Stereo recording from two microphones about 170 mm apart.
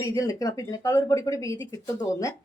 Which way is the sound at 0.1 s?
20° left (ahead or behind).